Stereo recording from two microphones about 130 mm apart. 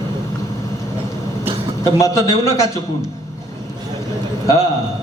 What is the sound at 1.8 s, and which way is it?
Speech, 25° left (ahead or behind).